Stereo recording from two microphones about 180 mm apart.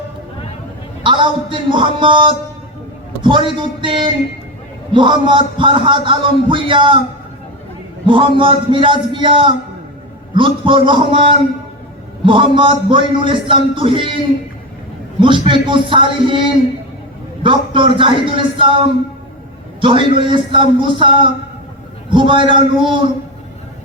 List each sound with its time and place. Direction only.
1.0 s a man's voice: 25° right (ahead or behind)
8.0 s a man's voice: 30° right (ahead or behind)
15.2 s a man's voice: 30° right (ahead or behind)
17.7 s a man's voice: 30° right (ahead or behind)
19.8 s a man's voice: 30° right (ahead or behind)